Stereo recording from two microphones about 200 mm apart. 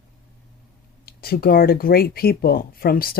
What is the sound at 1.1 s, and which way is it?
Speech, 50° left (ahead or behind).